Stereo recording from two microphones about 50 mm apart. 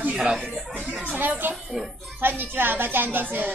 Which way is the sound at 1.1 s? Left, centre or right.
Right.